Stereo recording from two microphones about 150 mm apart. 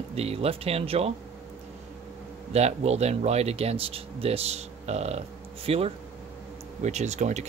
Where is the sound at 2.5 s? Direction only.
45° right (ahead or behind).